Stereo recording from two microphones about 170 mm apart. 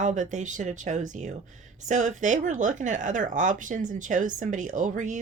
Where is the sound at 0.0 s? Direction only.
45° right (ahead or behind).